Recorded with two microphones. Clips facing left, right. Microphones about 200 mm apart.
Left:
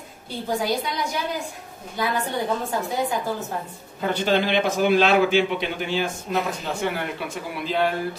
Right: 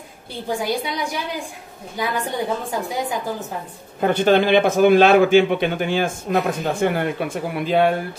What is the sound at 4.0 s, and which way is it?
A man's voice, 55° right (ahead or behind).